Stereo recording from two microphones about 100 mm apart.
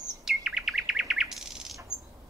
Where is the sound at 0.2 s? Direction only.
5° right (ahead or behind).